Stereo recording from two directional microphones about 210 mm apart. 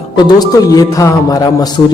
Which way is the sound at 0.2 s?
20° left (ahead or behind).